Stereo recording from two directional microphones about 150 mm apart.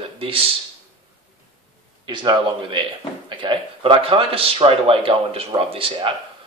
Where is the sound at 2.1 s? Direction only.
30° right (ahead or behind).